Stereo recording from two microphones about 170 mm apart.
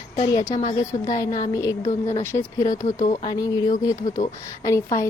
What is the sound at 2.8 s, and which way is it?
Speech, 45° left (ahead or behind).